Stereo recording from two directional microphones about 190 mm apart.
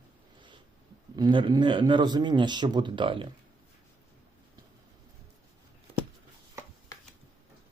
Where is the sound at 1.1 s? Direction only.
25° right (ahead or behind).